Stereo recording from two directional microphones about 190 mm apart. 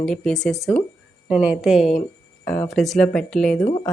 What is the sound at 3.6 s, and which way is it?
Speech, 25° left (ahead or behind).